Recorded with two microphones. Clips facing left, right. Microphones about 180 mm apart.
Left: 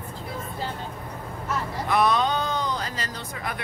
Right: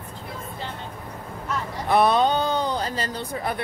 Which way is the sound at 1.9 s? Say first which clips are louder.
Right 4 dB; 30° right (ahead or behind).